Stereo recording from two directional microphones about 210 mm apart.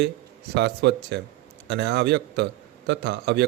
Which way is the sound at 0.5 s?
55° right (ahead or behind).